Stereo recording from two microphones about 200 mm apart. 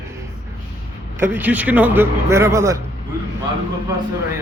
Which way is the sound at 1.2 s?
10° right (ahead or behind).